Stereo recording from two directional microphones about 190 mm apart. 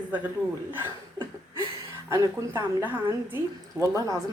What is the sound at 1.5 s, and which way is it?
A woman's voice, 20° right (ahead or behind).